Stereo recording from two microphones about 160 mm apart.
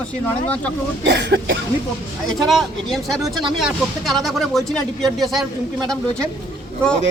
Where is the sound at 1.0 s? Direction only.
90° right.